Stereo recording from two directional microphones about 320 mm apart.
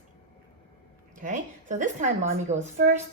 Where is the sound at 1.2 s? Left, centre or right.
Right.